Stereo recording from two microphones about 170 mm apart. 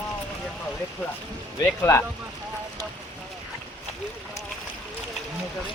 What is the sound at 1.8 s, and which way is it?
Speech, 15° left (ahead or behind).